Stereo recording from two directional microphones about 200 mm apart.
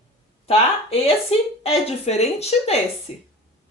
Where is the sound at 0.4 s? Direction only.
30° left (ahead or behind).